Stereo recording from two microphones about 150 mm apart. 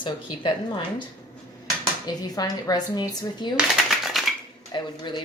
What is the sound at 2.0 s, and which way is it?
A woman's voice, 25° left (ahead or behind).